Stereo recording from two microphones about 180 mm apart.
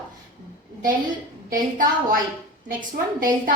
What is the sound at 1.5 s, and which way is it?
Speech, 50° right (ahead or behind).